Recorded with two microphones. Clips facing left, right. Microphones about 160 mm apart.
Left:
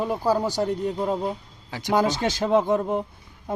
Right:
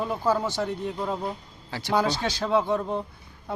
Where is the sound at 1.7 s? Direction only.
15° left (ahead or behind).